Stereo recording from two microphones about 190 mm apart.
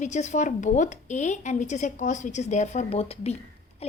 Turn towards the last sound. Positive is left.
turn(degrees=35)  # may be behind; listen again after turning